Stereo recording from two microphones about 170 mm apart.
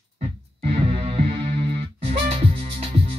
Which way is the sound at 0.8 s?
40° right (ahead or behind).